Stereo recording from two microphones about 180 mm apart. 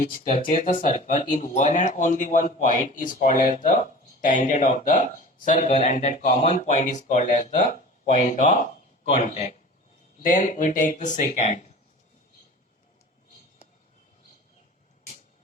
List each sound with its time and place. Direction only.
0.4 s speech: 50° left (ahead or behind)